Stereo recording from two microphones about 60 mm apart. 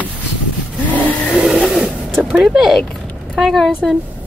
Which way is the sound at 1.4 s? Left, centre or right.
Centre.